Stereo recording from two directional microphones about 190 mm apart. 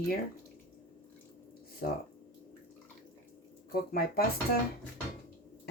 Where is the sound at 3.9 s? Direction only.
55° left (ahead or behind).